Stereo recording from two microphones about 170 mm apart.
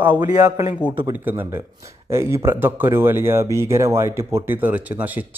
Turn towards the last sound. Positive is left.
turn(degrees=-10)  # may be behind; listen again after turning